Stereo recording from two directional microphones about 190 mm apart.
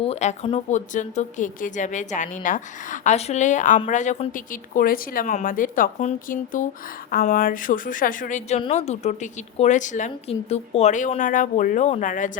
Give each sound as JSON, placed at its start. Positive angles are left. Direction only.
{"t": 0.0, "sound": "a woman's voice", "side_deg": 35}